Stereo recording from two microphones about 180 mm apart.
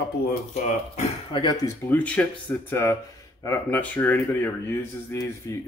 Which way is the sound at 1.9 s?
10° left (ahead or behind).